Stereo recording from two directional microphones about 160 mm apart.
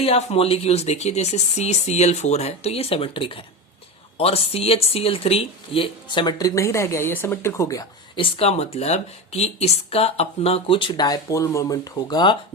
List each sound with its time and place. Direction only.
0.0 s speech: 40° left (ahead or behind); by 8.2 s 20° left (ahead or behind)
8.2 s speech: 40° left (ahead or behind)